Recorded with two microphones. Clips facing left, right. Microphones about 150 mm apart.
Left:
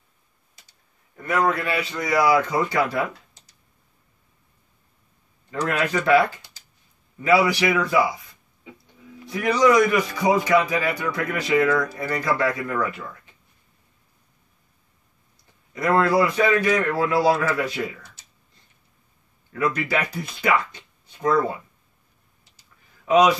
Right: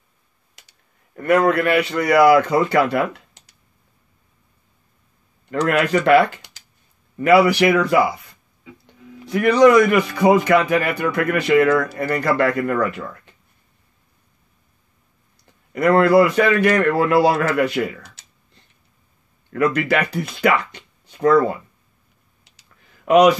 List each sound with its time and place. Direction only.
0.6 s speech: 70° right (ahead or behind)
5.5 s a man's voice: 70° right (ahead or behind)
9.3 s a man's voice: 65° right (ahead or behind)
15.7 s a man's voice: 65° right (ahead or behind)
22.4 s clicking: 70° right (ahead or behind)